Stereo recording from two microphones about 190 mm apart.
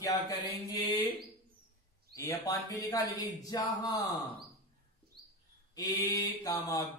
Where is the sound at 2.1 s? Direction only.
15° left (ahead or behind).